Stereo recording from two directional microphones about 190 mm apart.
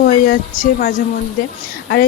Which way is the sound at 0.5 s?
45° left (ahead or behind).